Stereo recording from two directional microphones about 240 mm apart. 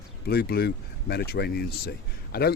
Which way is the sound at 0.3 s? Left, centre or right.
Left.